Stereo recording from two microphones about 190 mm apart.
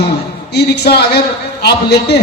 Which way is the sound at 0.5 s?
60° left (ahead or behind).